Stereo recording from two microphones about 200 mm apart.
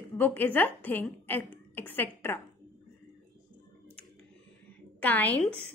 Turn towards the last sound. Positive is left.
turn(degrees=5)  # may be behind; listen again after turning